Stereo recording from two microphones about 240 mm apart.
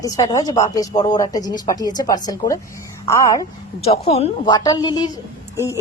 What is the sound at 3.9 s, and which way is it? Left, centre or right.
Speech, left.